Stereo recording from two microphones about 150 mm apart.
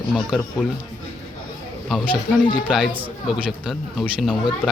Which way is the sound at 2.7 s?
10° right (ahead or behind).